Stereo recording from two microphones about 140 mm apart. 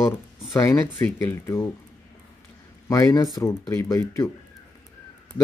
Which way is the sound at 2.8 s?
25° left (ahead or behind).